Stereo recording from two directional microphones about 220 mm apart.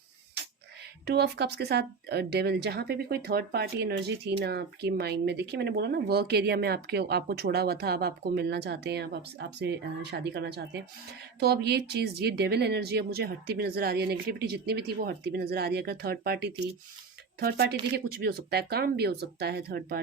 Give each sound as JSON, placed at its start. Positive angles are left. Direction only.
{"t": 1.0, "sound": "speech", "side_deg": -50}